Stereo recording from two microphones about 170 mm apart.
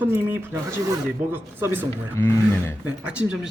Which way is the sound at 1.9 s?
15° left (ahead or behind).